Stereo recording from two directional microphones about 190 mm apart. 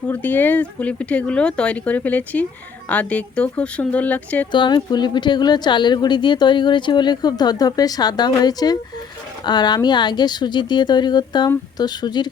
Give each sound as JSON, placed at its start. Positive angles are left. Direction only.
{"t": 0.1, "sound": "speech", "side_deg": 10}
{"t": 4.5, "sound": "a woman's voice", "side_deg": 25}